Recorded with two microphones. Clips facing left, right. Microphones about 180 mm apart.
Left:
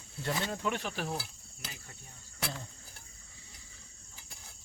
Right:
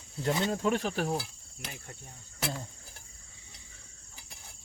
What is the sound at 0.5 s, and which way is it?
Cricket, 40° right (ahead or behind).